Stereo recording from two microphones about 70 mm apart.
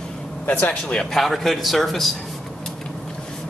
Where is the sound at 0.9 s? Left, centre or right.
Centre.